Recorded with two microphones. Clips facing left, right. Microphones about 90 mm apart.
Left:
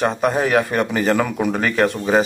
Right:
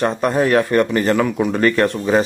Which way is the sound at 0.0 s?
5° left (ahead or behind).